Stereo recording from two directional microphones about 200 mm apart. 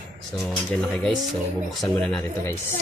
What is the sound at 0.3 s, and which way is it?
Speech, centre (ahead or behind).